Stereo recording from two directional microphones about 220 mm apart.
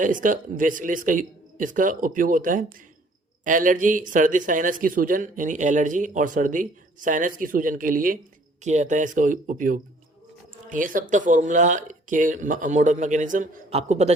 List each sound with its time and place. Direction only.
0.0 s speech: 35° right (ahead or behind)